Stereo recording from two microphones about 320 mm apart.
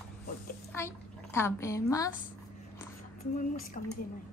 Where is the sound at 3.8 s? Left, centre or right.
Left.